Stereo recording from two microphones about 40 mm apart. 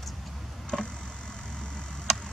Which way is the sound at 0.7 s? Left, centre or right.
Left.